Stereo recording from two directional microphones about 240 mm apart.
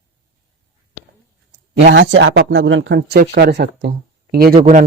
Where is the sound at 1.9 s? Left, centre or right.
Right.